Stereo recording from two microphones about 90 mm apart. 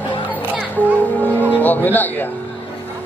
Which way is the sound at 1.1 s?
20° left (ahead or behind).